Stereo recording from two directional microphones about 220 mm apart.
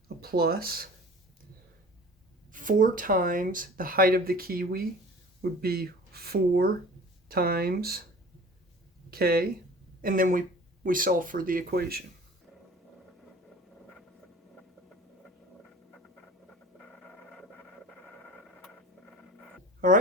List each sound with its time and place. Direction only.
0.2 s speech: 45° right (ahead or behind)
2.5 s speech: 40° right (ahead or behind)
9.0 s speech: 45° right (ahead or behind)
16.7 s a sound: 5° left (ahead or behind)